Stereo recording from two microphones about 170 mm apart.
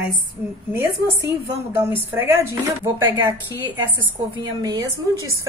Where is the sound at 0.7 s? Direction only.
15° right (ahead or behind).